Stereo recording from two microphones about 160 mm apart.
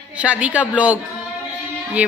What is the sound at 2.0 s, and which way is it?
Speech, 10° right (ahead or behind).